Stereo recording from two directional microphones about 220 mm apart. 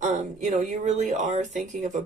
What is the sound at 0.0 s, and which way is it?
Speech, 35° right (ahead or behind).